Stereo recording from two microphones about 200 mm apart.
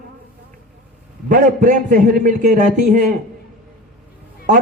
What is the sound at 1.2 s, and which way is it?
A man's voice, 40° right (ahead or behind).